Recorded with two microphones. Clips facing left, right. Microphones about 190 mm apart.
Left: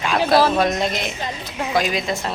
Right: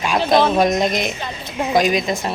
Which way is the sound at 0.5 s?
15° right (ahead or behind).